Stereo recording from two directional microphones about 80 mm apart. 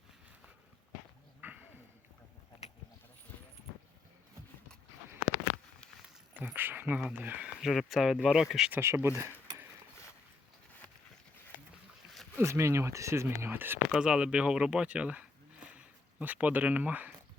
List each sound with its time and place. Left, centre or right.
1.4 s a sound: centre
6.3 s speech: right
7.4 s speech: centre
8.7 s speech: right
12.4 s speech: right
13.9 s speech: centre
15.6 s zipper: centre